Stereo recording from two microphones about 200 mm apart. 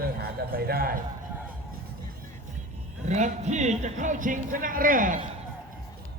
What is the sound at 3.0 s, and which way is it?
Speech, 35° right (ahead or behind).